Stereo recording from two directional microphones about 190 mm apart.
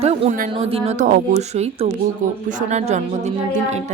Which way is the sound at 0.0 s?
35° right (ahead or behind).